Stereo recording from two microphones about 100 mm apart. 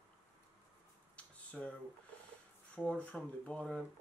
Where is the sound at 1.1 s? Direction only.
10° left (ahead or behind).